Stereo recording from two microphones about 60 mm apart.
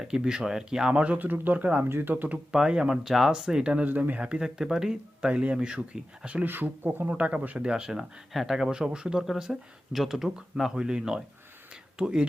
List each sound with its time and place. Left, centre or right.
0.0 s speech: centre
1.2 s speech: right
1.8 s speech: right
2.5 s speech: centre
3.8 s speech: right
4.2 s speech: centre
5.3 s speech: right
6.5 s speech: right
7.1 s speech: right
7.7 s speech: centre
11.7 s a sound: centre